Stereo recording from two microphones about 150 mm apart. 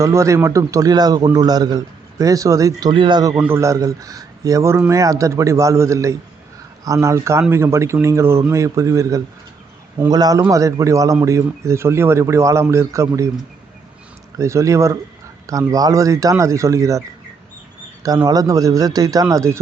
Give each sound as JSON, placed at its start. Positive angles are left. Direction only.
{"t": 0.0, "sound": "a man's voice", "side_deg": -20}
{"t": 3.3, "sound": "a man's voice", "side_deg": -15}
{"t": 14.3, "sound": "a man's voice", "side_deg": -20}
{"t": 18.3, "sound": "a man's voice", "side_deg": -25}